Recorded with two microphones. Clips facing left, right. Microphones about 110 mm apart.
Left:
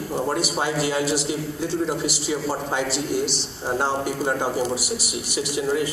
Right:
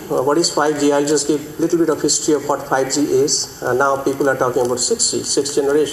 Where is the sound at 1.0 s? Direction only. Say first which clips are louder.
Right 8 dB; 65° right (ahead or behind).